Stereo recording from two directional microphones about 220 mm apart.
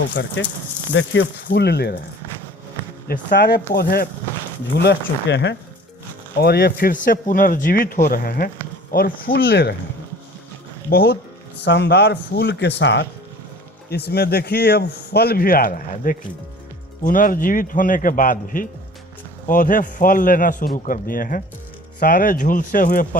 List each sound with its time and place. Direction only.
0.1 s a man's voice: 50° left (ahead or behind)
3.1 s a man's voice: 45° left (ahead or behind)
10.8 s a man's voice: 45° left (ahead or behind)